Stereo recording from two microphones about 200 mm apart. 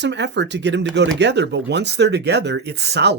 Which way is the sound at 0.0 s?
60° right (ahead or behind).